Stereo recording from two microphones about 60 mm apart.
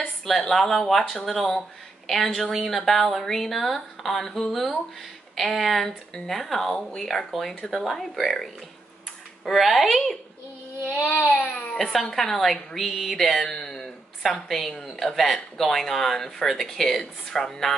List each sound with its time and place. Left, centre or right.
0.2 s speech: centre
11.1 s a woman's voice: centre